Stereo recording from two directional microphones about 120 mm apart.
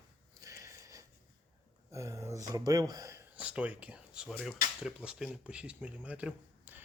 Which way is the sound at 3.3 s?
10° right (ahead or behind).